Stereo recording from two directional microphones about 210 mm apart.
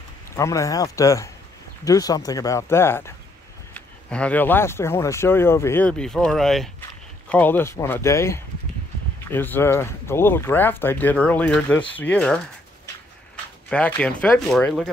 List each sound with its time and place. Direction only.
0.4 s speech: 15° left (ahead or behind)
13.7 s speech: 5° left (ahead or behind)